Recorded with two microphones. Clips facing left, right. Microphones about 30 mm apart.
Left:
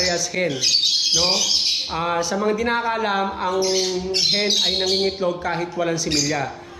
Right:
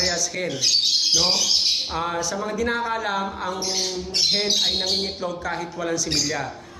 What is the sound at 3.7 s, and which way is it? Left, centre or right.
Bird, centre.